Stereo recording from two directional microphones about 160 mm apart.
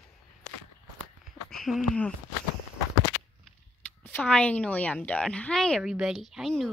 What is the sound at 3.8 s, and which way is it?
A woman's voice, 5° left (ahead or behind).